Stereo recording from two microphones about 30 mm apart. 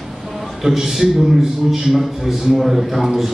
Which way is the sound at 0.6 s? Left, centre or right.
Right.